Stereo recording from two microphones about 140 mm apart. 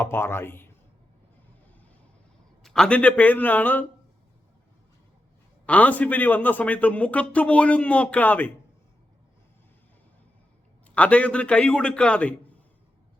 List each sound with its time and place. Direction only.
0.0 s speech: 15° left (ahead or behind)
2.6 s a man's voice: 5° left (ahead or behind)
5.6 s a man's voice: 10° left (ahead or behind)
10.8 s a man's voice: 10° left (ahead or behind)